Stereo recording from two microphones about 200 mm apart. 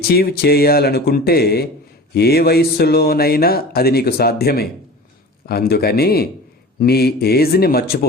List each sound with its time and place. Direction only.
0.1 s speech: 50° left (ahead or behind)